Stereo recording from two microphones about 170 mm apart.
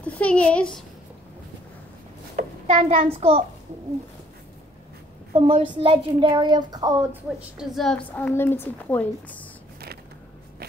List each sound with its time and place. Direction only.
0.0 s a woman's voice: 5° left (ahead or behind)
2.6 s a child's voice: 45° right (ahead or behind)
3.1 s a child's voice: 35° right (ahead or behind)
5.3 s a woman's voice: 35° right (ahead or behind); by 9.5 s 10° left (ahead or behind)